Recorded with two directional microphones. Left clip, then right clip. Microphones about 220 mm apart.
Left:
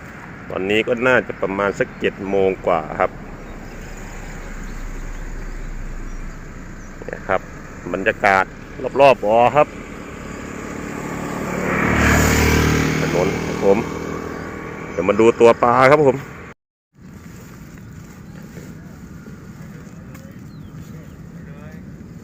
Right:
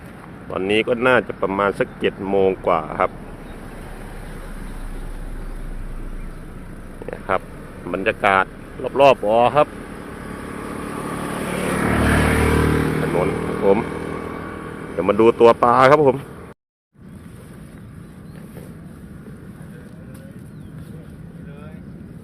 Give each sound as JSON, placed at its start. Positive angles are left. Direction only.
{"t": 0.5, "sound": "speech", "side_deg": -5}
{"t": 7.0, "sound": "a sound", "side_deg": 0}
{"t": 7.9, "sound": "speech", "side_deg": 0}
{"t": 9.7, "sound": "vehicle", "side_deg": -30}
{"t": 11.9, "sound": "vehicle", "side_deg": 30}
{"t": 12.2, "sound": "vehicle", "side_deg": 45}
{"t": 14.9, "sound": "speech", "side_deg": 0}